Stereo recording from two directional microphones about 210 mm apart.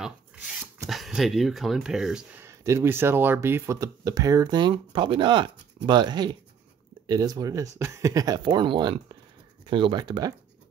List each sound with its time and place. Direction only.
0.0 s filing: 5° right (ahead or behind)
0.8 s speech: centre (ahead or behind); by 10.3 s 20° right (ahead or behind)